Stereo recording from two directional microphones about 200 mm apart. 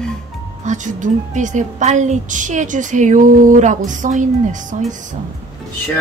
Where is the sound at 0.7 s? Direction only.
40° right (ahead or behind).